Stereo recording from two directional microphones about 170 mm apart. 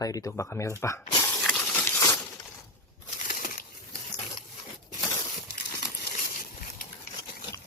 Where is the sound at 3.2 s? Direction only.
55° left (ahead or behind).